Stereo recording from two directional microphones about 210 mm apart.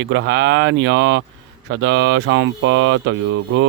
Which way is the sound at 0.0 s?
60° right (ahead or behind).